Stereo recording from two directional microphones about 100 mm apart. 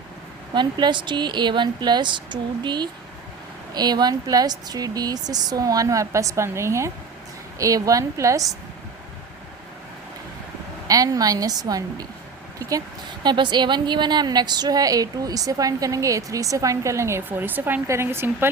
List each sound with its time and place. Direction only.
0.5 s a woman's voice: 50° right (ahead or behind); by 8.4 s 30° right (ahead or behind)
10.8 s a woman's voice: 35° right (ahead or behind)
13.2 s a woman's voice: 50° right (ahead or behind); by 18.4 s 25° right (ahead or behind)